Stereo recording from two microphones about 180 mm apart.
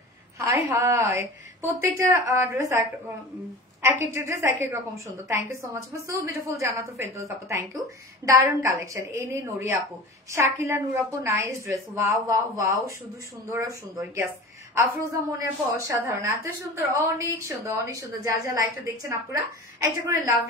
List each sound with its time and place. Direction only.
0.7 s a woman's voice: 15° right (ahead or behind)